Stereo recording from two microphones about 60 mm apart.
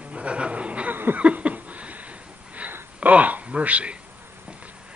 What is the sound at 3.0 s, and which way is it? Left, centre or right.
Speech, right.